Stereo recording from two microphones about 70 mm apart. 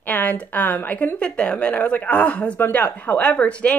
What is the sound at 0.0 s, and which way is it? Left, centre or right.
Speech, left.